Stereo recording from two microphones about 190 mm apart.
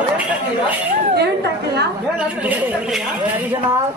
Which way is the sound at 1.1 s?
60° right (ahead or behind).